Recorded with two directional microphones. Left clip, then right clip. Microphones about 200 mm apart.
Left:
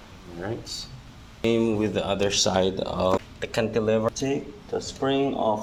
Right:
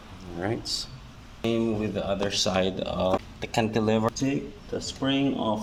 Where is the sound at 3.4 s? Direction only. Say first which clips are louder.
Left 1 dB; 20° right (ahead or behind).